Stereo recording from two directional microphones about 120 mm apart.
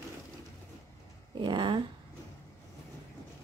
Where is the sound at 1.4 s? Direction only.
40° right (ahead or behind).